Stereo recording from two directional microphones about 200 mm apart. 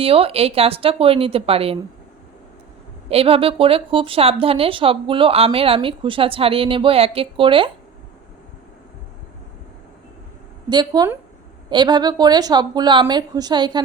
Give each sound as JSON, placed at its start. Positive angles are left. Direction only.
{"t": 0.0, "sound": "speech", "side_deg": -30}
{"t": 3.1, "sound": "speech", "side_deg": -30}
{"t": 10.7, "sound": "speech", "side_deg": -20}